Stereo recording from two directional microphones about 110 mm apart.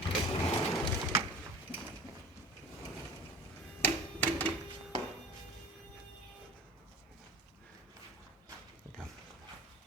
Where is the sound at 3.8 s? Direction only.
15° left (ahead or behind).